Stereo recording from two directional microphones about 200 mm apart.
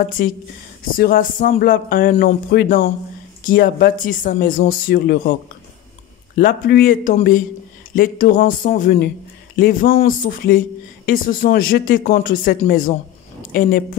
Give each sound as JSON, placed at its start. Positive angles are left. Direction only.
{"t": 0.9, "sound": "speech", "side_deg": 45}
{"t": 6.3, "sound": "speech", "side_deg": 45}